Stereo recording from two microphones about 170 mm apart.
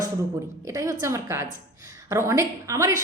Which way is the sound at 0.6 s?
20° right (ahead or behind).